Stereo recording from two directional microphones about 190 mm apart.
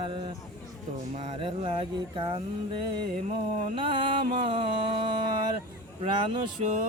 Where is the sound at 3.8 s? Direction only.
25° right (ahead or behind).